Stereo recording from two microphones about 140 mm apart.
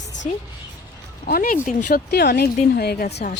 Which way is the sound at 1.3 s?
90° left.